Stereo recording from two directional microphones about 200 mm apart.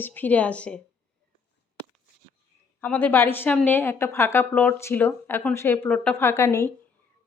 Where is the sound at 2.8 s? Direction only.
5° left (ahead or behind).